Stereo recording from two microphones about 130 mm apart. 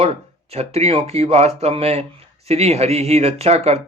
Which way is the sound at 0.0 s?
50° right (ahead or behind).